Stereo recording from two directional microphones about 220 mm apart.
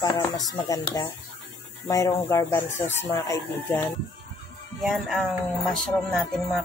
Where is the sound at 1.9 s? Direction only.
15° left (ahead or behind).